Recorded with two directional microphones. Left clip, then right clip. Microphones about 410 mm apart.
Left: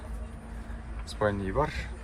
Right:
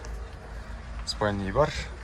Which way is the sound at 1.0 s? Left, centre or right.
Centre.